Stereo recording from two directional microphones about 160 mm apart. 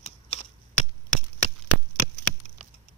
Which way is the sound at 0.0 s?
40° left (ahead or behind).